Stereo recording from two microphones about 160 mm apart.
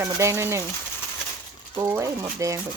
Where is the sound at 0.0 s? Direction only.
15° right (ahead or behind).